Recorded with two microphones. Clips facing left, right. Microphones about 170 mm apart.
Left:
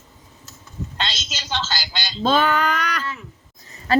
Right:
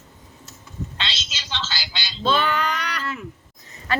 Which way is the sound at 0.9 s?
45° left (ahead or behind).